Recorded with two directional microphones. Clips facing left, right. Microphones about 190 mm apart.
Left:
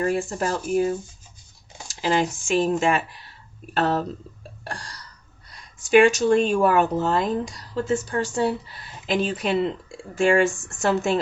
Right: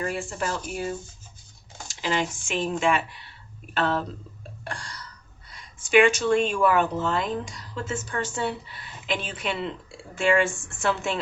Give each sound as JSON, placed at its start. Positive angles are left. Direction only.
{"t": 0.0, "sound": "speech", "side_deg": 40}
{"t": 4.6, "sound": "a sound", "side_deg": 35}
{"t": 5.5, "sound": "speech", "side_deg": 35}